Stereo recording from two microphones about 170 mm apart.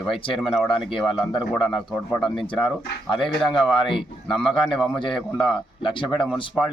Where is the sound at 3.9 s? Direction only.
30° left (ahead or behind).